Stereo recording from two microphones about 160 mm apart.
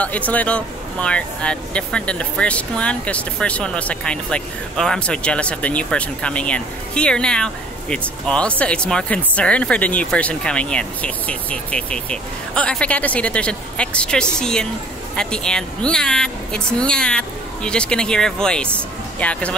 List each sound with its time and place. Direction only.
0.3 s speech: 10° left (ahead or behind)